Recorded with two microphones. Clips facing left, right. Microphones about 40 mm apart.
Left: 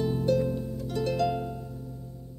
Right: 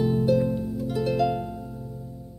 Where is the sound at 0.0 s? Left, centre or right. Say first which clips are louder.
Right 4 dB; centre.